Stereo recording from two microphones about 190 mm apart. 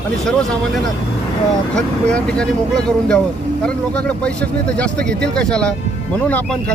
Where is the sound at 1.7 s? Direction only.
5° left (ahead or behind).